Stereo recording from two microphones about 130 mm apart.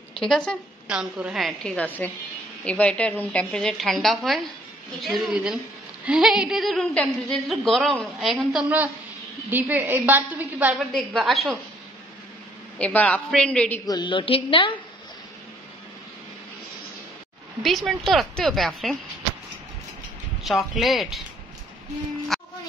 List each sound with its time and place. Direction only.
0.2 s a woman's voice: 5° left (ahead or behind)
0.8 s a woman's voice: 10° right (ahead or behind)
8.6 s a woman's voice: 15° right (ahead or behind)
11.0 s a woman's voice: centre (ahead or behind)
12.7 s a man's voice: 10° left (ahead or behind)
13.8 s a woman's voice: 35° left (ahead or behind)
17.6 s a woman's voice: centre (ahead or behind)
20.4 s a woman's voice: centre (ahead or behind)
22.3 s a sound: centre (ahead or behind)